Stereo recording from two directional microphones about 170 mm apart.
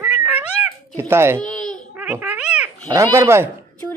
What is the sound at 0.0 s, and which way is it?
Cat, 10° right (ahead or behind).